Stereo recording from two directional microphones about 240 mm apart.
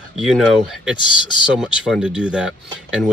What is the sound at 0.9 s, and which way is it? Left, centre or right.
Speech, centre.